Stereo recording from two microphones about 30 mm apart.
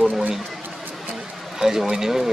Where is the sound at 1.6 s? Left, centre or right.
Centre.